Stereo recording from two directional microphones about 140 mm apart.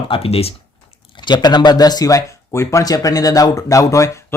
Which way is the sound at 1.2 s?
30° left (ahead or behind).